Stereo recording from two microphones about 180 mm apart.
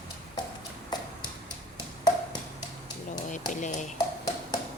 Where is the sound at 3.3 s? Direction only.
45° left (ahead or behind).